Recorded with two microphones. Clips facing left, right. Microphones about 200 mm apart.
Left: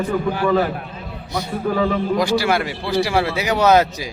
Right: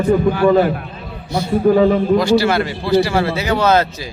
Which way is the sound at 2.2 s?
15° left (ahead or behind).